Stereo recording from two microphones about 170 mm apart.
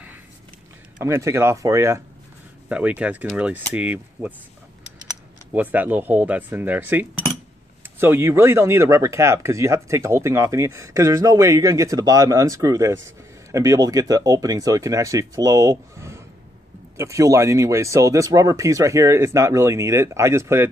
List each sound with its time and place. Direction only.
0.9 s speech: 15° right (ahead or behind)
5.5 s speech: 10° right (ahead or behind)